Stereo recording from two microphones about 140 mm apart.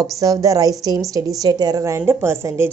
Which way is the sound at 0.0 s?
25° right (ahead or behind).